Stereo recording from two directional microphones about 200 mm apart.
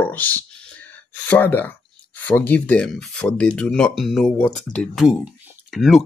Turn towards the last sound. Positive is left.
turn(degrees=0)  # may be behind; listen again after turning